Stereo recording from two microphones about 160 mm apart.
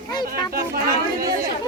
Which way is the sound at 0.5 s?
65° right (ahead or behind).